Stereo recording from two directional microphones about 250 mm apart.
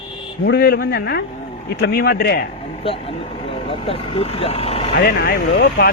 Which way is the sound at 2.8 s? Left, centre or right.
Left.